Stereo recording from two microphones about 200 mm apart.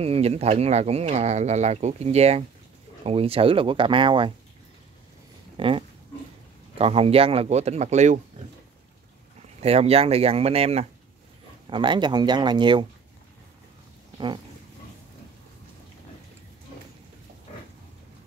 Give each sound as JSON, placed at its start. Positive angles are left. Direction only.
{"t": 0.0, "sound": "speech", "side_deg": -30}
{"t": 5.6, "sound": "speech", "side_deg": -25}
{"t": 9.6, "sound": "speech", "side_deg": -30}